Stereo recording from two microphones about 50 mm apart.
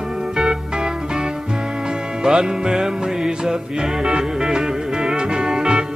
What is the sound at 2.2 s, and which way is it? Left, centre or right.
Music, centre.